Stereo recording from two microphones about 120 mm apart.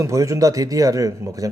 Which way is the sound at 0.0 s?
25° right (ahead or behind).